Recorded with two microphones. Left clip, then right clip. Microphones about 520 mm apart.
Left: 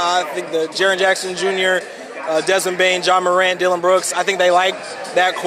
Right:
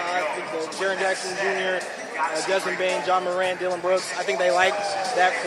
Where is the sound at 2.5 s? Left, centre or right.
Left.